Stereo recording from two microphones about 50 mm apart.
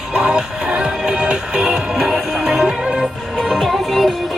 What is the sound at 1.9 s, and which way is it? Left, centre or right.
Music, centre.